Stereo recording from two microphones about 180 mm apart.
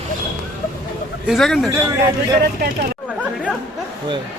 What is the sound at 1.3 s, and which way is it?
Speech, centre (ahead or behind).